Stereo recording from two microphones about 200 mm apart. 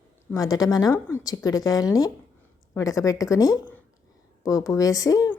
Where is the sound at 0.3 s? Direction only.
20° left (ahead or behind).